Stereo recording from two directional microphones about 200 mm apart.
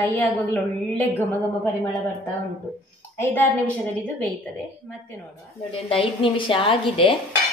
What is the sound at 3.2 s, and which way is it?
Speech, 10° left (ahead or behind).